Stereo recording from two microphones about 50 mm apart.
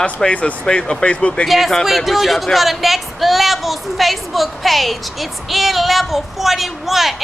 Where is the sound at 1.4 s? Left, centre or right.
Centre.